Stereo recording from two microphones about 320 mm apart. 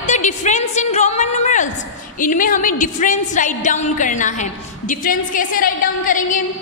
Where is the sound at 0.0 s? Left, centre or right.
Left.